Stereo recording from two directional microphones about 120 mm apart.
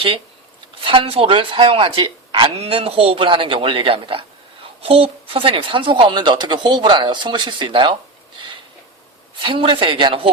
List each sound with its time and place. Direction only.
0.9 s a woman's voice: 50° right (ahead or behind)
9.4 s speech: 45° right (ahead or behind)